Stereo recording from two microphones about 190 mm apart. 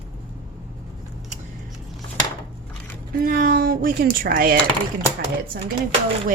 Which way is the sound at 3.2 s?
50° right (ahead or behind).